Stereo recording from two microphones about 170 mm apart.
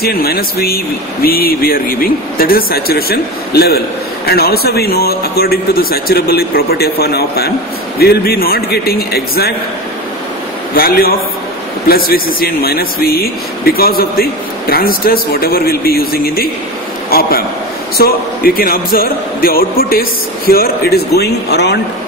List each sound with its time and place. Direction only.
0.0 s speech: 65° left (ahead or behind)
10.7 s speech: 60° left (ahead or behind); by 21.7 s 75° left (ahead or behind)